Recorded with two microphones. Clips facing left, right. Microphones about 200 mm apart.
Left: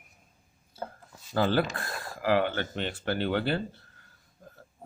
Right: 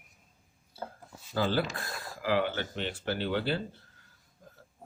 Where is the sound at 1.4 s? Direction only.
55° left (ahead or behind).